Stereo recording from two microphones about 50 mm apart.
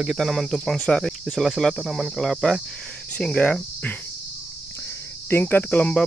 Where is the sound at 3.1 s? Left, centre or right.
Left.